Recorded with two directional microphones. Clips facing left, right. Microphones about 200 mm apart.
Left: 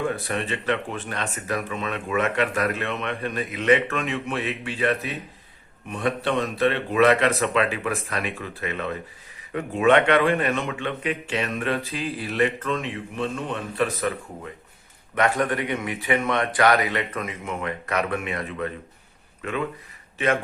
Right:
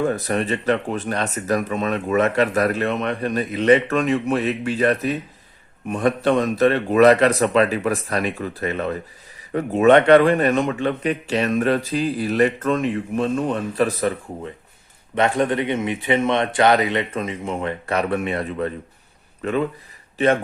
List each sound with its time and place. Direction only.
0.1 s a man's voice: 40° right (ahead or behind)